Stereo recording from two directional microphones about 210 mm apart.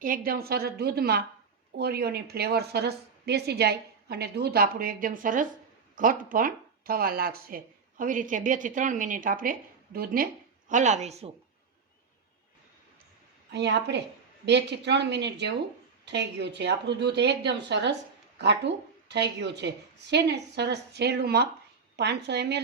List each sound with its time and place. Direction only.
0.0 s a woman's voice: 45° right (ahead or behind)
13.5 s a woman's voice: 55° right (ahead or behind)